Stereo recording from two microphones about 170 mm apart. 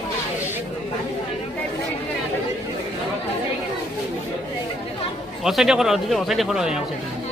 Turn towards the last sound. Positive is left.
turn(degrees=-5)  # may be behind; listen again after turning